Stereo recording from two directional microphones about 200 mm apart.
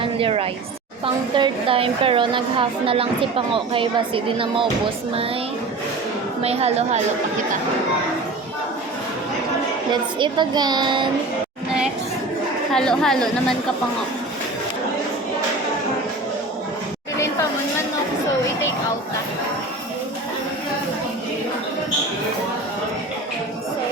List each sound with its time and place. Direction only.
0.0 s a sound: 25° right (ahead or behind)
1.0 s a woman's voice: 25° right (ahead or behind)
6.4 s a woman's voice: 30° right (ahead or behind)
9.9 s a woman's voice: 20° right (ahead or behind)
12.7 s a woman's voice: 5° left (ahead or behind)